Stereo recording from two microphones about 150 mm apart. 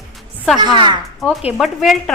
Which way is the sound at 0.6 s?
30° right (ahead or behind).